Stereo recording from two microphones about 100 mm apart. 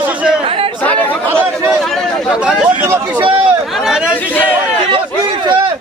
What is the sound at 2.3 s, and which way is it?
Speech, 10° right (ahead or behind).